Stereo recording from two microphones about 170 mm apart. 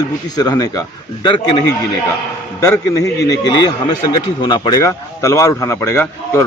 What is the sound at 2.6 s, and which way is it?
Speech, 20° left (ahead or behind).